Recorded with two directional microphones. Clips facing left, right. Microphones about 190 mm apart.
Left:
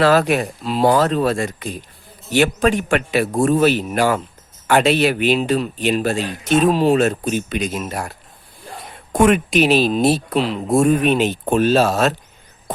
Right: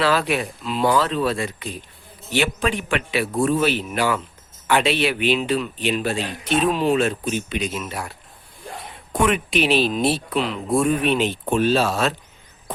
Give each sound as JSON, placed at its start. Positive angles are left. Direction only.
{"t": 0.0, "sound": "speech", "side_deg": 45}
{"t": 9.1, "sound": "speech", "side_deg": 45}